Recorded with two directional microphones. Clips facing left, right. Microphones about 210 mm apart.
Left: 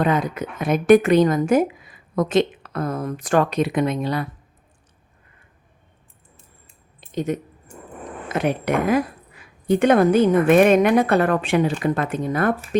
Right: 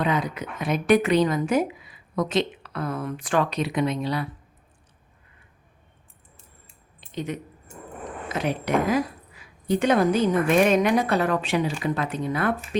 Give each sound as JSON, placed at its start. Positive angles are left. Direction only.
{"t": 0.0, "sound": "a woman's voice", "side_deg": 50}
{"t": 7.0, "sound": "a sound", "side_deg": 45}
{"t": 8.3, "sound": "a woman's voice", "side_deg": 55}